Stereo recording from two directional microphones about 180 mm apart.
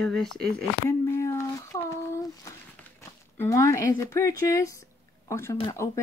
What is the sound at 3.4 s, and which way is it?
Speech, 15° left (ahead or behind).